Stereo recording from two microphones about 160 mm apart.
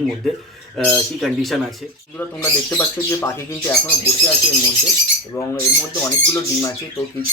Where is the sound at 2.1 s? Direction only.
10° left (ahead or behind).